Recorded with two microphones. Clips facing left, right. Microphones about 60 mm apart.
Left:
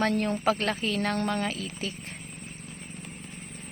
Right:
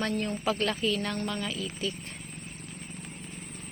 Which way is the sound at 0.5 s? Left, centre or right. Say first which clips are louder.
Even; left.